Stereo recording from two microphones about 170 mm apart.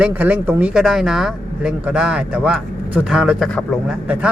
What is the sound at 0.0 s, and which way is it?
Speech, 10° right (ahead or behind).